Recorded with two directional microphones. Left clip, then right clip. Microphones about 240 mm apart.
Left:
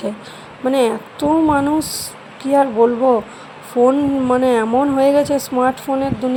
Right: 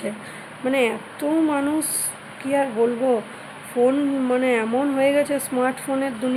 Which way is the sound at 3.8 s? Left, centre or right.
Centre.